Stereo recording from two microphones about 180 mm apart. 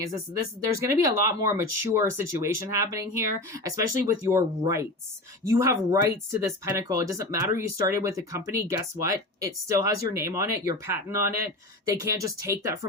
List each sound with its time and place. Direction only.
0.9 s speech: 15° right (ahead or behind)